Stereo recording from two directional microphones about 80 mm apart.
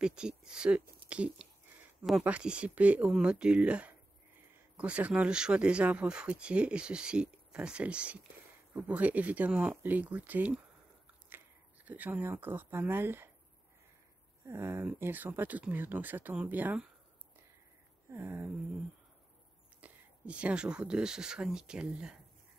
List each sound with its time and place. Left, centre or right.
0.0 s speech: centre; by 13.3 s right
14.4 s speech: right
18.1 s speech: right
19.8 s speech: centre